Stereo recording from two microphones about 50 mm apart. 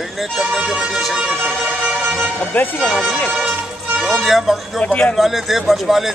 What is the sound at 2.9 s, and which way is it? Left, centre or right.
Speech, centre.